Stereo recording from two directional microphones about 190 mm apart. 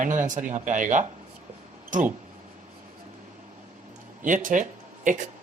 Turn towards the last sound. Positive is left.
turn(degrees=-40)  # may be behind; listen again after turning